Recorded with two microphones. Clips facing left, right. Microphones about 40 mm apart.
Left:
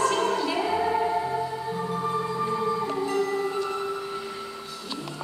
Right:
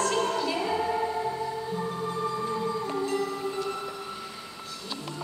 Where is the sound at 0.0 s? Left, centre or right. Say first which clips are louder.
Left 3 dB; centre.